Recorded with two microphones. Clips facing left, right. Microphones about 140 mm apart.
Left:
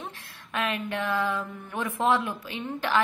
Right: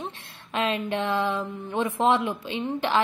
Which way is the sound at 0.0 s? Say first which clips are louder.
Right 4 dB; 25° right (ahead or behind).